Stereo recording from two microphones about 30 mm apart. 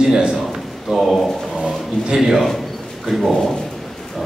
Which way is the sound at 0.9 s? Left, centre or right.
Centre.